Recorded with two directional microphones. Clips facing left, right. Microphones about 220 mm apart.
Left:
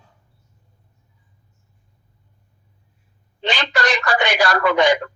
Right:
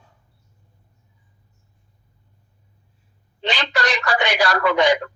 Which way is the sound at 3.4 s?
50° left (ahead or behind).